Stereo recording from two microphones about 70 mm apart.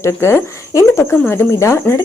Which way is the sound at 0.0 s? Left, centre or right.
Left.